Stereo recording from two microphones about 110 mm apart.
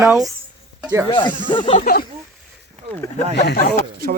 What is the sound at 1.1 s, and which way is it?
Speech, 45° left (ahead or behind).